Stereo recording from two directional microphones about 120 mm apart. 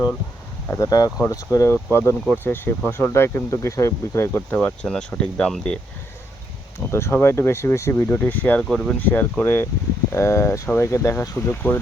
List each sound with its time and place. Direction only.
0.8 s speech: 30° left (ahead or behind); by 5.8 s 5° left (ahead or behind)
6.7 s speech: 20° left (ahead or behind)
8.6 s speech: centre (ahead or behind)
9.0 s speech: 15° left (ahead or behind)